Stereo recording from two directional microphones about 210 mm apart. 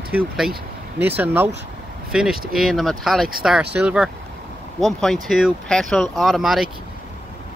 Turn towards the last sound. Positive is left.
turn(degrees=0)  # may be behind; listen again after turning